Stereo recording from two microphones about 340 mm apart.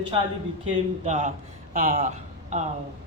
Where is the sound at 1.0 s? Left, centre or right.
Centre.